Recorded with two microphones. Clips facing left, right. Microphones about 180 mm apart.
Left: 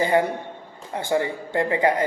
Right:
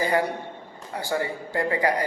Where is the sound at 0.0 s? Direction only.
25° left (ahead or behind).